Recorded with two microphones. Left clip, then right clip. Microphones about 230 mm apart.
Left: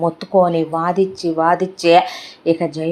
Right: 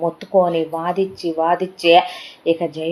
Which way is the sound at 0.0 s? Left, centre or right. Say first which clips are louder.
Left 2 dB; left.